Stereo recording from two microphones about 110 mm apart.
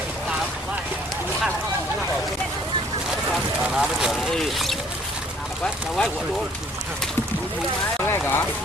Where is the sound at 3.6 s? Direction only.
5° right (ahead or behind).